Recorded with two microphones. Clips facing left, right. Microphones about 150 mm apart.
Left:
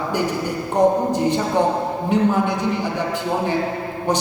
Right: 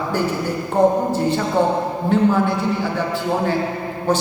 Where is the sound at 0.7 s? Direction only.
15° left (ahead or behind).